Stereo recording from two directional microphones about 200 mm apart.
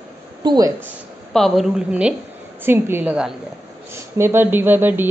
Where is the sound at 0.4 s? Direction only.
20° right (ahead or behind).